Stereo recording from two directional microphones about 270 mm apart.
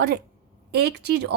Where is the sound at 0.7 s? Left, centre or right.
Right.